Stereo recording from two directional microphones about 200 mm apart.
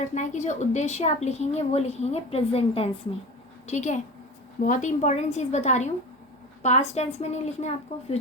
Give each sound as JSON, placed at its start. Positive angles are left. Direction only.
{"t": 0.0, "sound": "a woman's voice", "side_deg": 35}